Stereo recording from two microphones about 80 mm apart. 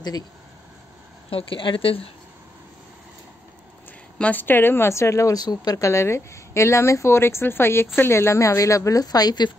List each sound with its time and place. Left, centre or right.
1.5 s a woman's voice: left
4.2 s a woman's voice: left
5.4 s speech: left
5.9 s a woman's voice: left